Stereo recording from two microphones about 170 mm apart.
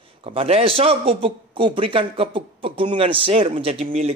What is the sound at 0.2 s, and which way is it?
A man's voice, 35° right (ahead or behind).